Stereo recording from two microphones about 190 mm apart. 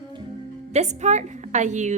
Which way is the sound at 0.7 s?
35° right (ahead or behind).